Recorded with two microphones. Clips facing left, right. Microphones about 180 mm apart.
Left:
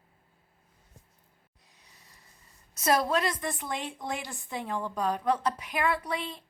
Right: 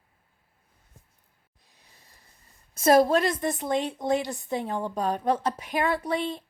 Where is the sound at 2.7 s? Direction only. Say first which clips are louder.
Right 6 dB; 50° right (ahead or behind).